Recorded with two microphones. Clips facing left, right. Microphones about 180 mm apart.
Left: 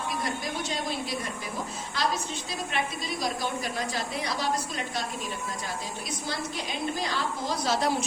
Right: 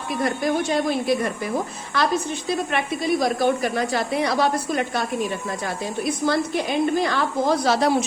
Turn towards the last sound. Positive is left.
turn(degrees=-70)  # may be behind; listen again after turning